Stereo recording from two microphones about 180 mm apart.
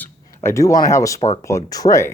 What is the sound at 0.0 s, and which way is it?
Speech, 15° left (ahead or behind).